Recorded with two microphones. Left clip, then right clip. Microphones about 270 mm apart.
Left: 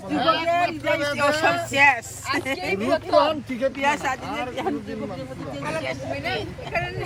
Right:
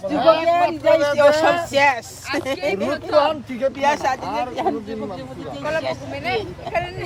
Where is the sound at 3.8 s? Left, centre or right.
Right.